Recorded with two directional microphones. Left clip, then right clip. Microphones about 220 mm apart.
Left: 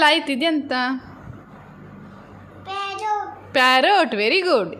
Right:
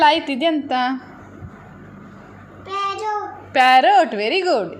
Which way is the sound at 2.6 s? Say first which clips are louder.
Right 4 dB; 20° left (ahead or behind).